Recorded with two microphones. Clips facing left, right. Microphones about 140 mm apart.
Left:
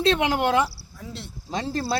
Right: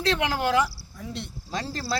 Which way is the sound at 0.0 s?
20° left (ahead or behind).